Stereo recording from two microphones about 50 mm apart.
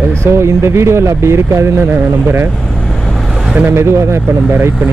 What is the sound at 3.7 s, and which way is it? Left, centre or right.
Speech, right.